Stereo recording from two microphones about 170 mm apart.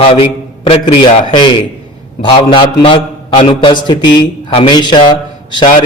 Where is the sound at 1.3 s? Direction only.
25° left (ahead or behind).